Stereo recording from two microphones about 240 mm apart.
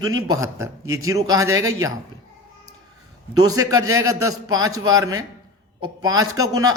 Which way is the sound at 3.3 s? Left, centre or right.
Centre.